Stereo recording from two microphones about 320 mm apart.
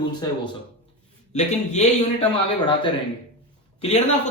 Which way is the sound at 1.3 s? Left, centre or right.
Left.